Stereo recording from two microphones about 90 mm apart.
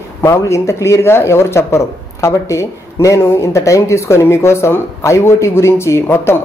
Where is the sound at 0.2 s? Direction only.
30° left (ahead or behind).